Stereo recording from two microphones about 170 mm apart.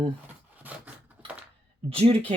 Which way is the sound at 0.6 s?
10° right (ahead or behind).